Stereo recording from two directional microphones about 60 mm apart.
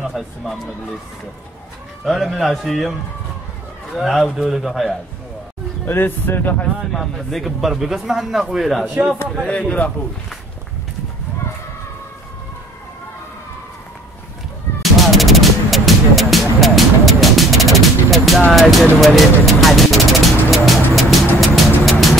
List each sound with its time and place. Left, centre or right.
2.0 s speech: centre
3.9 s speech: centre
5.9 s speech: left
6.9 s speech: centre
9.5 s a man's voice: left
14.8 s music: centre